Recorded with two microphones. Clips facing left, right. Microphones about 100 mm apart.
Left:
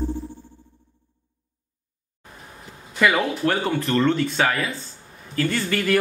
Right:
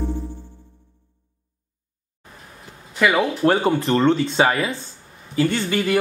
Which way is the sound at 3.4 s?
30° right (ahead or behind).